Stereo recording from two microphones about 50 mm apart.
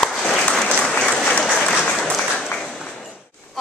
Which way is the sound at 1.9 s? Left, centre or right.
Centre.